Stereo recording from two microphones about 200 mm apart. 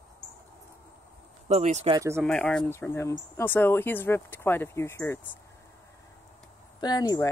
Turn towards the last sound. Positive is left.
turn(degrees=20)  # may be behind; listen again after turning